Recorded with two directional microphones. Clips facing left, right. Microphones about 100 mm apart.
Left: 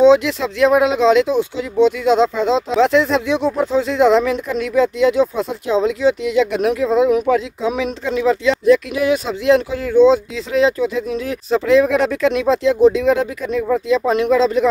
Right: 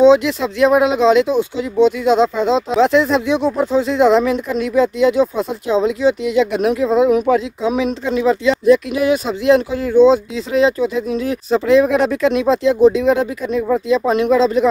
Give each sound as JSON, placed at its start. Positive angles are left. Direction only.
{"t": 0.0, "sound": "speech", "side_deg": -10}
{"t": 7.6, "sound": "speech", "side_deg": -15}
{"t": 9.9, "sound": "speech", "side_deg": -15}